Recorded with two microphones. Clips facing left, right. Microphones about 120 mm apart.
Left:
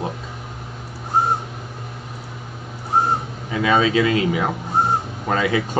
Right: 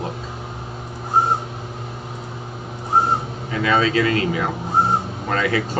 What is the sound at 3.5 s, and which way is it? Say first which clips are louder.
A man's voice: left 1 dB; 15° left (ahead or behind).